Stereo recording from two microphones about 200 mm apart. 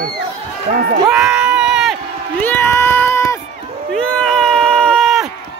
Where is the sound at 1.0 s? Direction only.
5° right (ahead or behind).